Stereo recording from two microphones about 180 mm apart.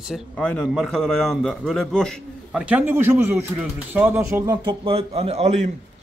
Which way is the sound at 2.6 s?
10° right (ahead or behind).